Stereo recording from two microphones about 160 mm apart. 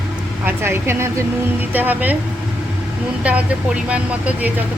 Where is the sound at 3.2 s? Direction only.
10° right (ahead or behind).